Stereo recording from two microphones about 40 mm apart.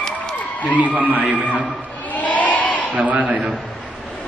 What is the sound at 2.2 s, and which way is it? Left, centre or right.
Crowd, left.